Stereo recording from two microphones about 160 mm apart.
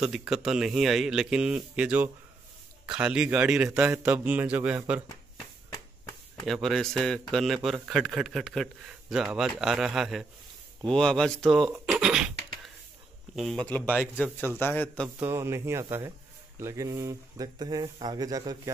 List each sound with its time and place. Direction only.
0.0 s a man's voice: 5° right (ahead or behind)
6.4 s a man's voice: centre (ahead or behind)
13.4 s speech: 5° left (ahead or behind)
15.1 s a man's voice: 15° right (ahead or behind)